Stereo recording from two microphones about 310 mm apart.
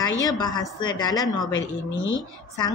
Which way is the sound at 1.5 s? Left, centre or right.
Left.